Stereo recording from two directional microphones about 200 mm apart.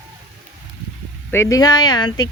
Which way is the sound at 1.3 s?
15° left (ahead or behind).